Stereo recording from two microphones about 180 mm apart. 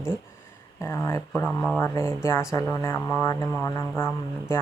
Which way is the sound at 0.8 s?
15° left (ahead or behind).